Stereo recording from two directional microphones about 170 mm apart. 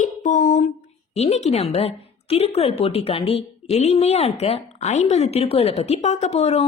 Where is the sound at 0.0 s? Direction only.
45° left (ahead or behind).